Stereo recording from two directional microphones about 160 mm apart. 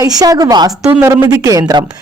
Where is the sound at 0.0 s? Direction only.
25° right (ahead or behind).